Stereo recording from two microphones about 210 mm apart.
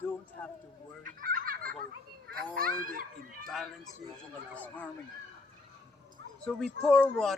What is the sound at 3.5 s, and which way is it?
Speech, centre (ahead or behind).